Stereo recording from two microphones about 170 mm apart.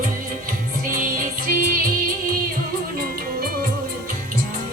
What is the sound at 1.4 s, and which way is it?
Music, 55° right (ahead or behind).